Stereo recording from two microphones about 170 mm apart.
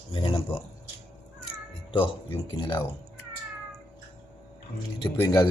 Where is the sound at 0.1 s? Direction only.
35° left (ahead or behind).